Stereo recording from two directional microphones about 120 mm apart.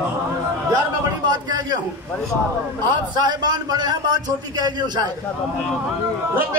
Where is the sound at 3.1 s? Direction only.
35° right (ahead or behind).